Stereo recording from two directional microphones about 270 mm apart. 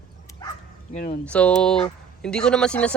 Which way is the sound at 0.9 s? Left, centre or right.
Left.